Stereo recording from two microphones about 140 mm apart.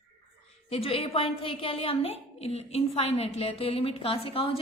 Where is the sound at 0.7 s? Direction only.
45° left (ahead or behind).